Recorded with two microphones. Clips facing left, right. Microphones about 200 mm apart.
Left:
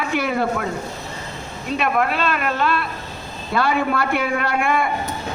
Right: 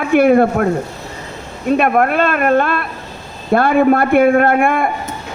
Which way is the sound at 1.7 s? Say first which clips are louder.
Right 7 dB; 55° right (ahead or behind).